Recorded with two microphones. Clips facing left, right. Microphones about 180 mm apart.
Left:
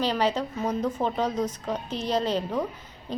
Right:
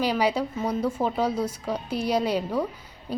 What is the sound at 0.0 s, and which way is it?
A woman's voice, 10° right (ahead or behind).